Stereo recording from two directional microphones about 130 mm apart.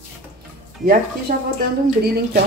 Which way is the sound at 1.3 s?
90° right.